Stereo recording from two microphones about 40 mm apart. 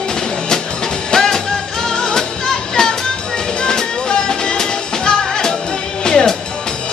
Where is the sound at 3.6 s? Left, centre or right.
Centre.